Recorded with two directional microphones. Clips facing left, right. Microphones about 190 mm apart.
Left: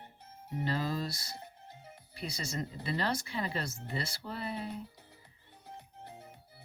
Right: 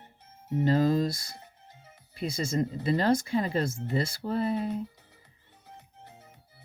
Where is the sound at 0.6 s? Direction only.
45° right (ahead or behind).